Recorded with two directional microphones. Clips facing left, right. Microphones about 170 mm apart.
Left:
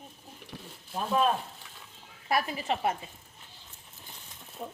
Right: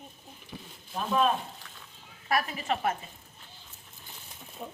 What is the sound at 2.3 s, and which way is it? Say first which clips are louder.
Speech: even; 30° left (ahead or behind).